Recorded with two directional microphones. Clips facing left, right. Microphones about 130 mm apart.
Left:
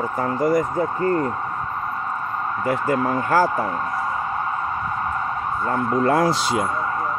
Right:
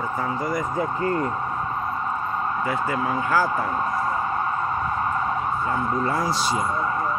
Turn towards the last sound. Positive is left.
turn(degrees=60)  # may be behind; listen again after turning